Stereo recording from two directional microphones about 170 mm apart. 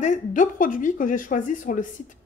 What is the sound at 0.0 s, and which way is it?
Speech, 45° left (ahead or behind).